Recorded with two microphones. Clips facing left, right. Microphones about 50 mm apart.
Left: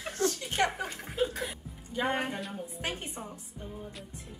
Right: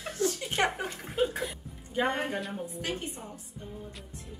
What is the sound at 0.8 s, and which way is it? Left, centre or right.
Speech, centre.